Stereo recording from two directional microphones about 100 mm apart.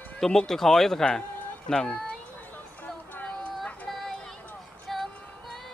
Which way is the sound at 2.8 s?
15° left (ahead or behind).